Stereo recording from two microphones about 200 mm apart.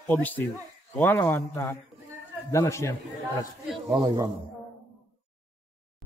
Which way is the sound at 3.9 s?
20° right (ahead or behind).